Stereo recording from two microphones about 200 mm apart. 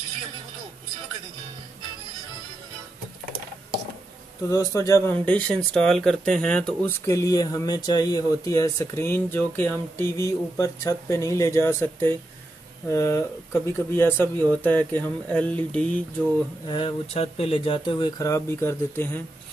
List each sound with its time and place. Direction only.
4.5 s speech: 15° left (ahead or behind)
16.6 s speech: 25° left (ahead or behind)